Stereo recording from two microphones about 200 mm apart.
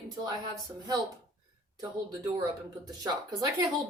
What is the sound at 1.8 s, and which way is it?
A woman's voice, 20° right (ahead or behind).